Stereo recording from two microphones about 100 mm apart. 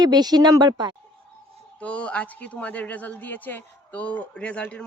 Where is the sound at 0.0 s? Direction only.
45° right (ahead or behind).